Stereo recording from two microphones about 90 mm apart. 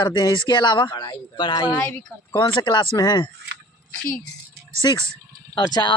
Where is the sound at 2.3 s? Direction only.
60° left (ahead or behind).